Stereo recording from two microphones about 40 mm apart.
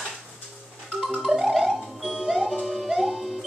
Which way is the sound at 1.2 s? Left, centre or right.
Centre.